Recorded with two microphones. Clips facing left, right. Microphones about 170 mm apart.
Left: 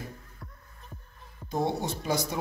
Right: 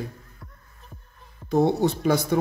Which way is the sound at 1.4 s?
65° right (ahead or behind).